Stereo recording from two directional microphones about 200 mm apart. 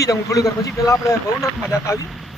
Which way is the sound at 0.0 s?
15° left (ahead or behind).